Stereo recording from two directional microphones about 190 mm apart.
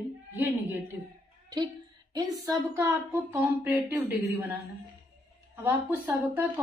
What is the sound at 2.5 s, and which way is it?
A woman's voice, 10° right (ahead or behind).